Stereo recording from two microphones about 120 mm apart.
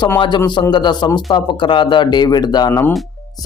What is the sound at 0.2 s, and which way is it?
A man's voice, 35° left (ahead or behind).